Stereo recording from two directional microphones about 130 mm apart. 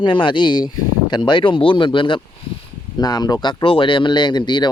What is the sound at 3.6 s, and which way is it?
Speech, 40° left (ahead or behind).